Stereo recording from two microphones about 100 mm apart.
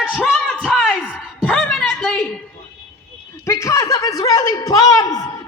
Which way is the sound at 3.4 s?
30° left (ahead or behind).